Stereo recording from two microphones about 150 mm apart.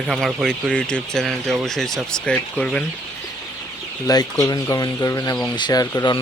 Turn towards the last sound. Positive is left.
turn(degrees=25)  # may be behind; listen again after turning